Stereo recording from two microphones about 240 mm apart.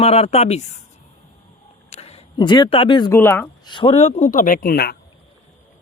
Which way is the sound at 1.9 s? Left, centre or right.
Left.